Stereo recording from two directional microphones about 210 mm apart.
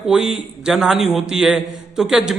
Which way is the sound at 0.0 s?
5° right (ahead or behind).